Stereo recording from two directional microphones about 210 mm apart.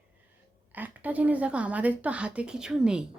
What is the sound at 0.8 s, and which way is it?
Speech, 5° right (ahead or behind).